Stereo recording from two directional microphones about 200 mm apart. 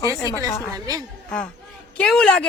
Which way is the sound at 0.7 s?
20° right (ahead or behind).